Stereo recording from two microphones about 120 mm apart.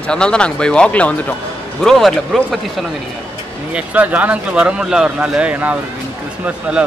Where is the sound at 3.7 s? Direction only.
10° right (ahead or behind).